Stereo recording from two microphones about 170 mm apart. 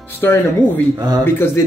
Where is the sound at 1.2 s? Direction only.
15° left (ahead or behind).